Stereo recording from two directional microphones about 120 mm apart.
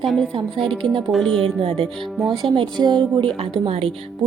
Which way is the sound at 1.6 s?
45° right (ahead or behind).